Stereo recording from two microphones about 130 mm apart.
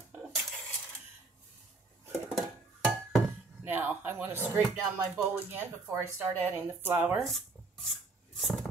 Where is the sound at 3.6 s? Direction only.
15° right (ahead or behind).